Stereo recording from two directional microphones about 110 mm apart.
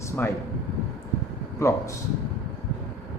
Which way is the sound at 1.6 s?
25° left (ahead or behind).